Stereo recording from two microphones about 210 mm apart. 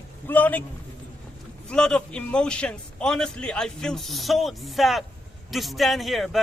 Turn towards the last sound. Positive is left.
turn(degrees=0)  # may be behind; listen again after turning